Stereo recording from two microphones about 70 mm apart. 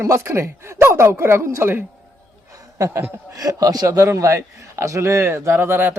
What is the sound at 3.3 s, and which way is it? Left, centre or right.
Speech, right.